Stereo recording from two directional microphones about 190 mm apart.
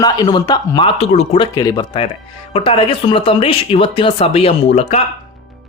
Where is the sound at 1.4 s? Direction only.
20° left (ahead or behind).